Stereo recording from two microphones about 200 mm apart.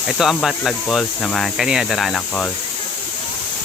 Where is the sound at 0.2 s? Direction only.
Centre (ahead or behind).